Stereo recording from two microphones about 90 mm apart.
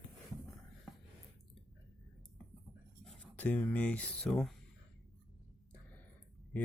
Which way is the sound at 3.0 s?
5° left (ahead or behind).